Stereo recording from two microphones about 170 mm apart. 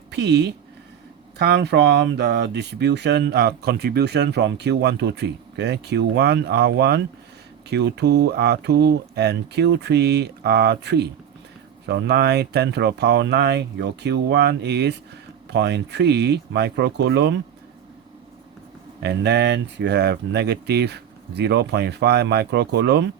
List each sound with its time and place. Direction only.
0.1 s speech: 80° right
7.7 s speech: 90° right
19.0 s speech: 75° right (ahead or behind)